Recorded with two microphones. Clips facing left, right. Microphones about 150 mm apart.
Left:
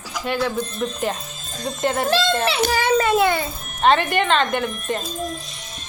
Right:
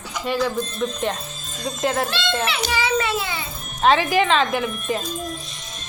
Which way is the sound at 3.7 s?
Centre (ahead or behind).